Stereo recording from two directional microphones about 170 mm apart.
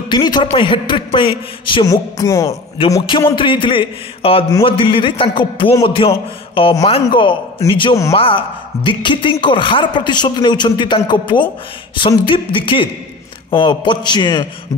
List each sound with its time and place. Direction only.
0.1 s a man's voice: 25° left (ahead or behind)
1.9 s music: 15° left (ahead or behind)
2.9 s a man's voice: 20° left (ahead or behind)
3.3 s a sound: 30° left (ahead or behind)
6.8 s a man's voice: 30° left (ahead or behind)